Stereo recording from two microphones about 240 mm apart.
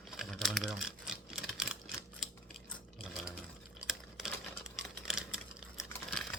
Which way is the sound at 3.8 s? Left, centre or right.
Centre.